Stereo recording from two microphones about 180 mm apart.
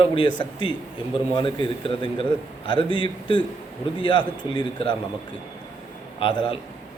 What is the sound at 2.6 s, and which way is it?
A man's voice, 25° left (ahead or behind).